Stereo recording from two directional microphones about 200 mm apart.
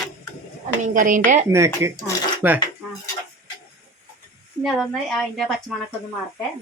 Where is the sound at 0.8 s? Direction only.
40° right (ahead or behind).